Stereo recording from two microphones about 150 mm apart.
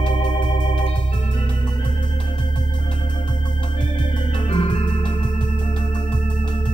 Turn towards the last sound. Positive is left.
turn(degrees=35)  # may be behind; listen again after turning